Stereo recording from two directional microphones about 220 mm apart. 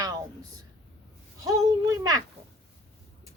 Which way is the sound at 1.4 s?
15° right (ahead or behind).